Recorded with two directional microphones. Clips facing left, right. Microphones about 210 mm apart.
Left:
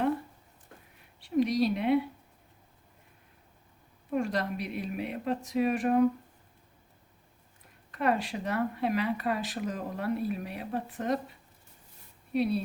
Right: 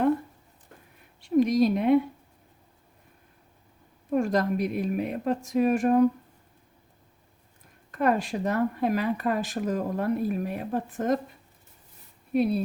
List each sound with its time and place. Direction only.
1.2 s speech: 45° right (ahead or behind)
4.1 s speech: 45° right (ahead or behind)
7.9 s speech: 45° right (ahead or behind)
12.3 s speech: 50° right (ahead or behind)